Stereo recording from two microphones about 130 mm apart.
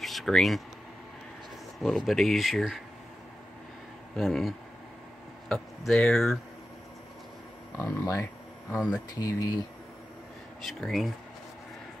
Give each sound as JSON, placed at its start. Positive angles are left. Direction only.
{"t": 0.0, "sound": "a sound", "side_deg": 0}
{"t": 1.8, "sound": "speech", "side_deg": 0}
{"t": 4.2, "sound": "speech", "side_deg": 0}
{"t": 7.7, "sound": "speech", "side_deg": 20}
{"t": 8.7, "sound": "speech", "side_deg": -5}
{"t": 9.1, "sound": "speech", "side_deg": 30}
{"t": 10.6, "sound": "speech", "side_deg": 0}